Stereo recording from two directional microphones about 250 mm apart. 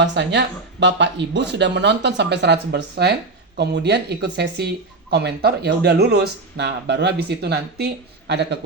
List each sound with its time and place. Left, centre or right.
0.0 s speech: right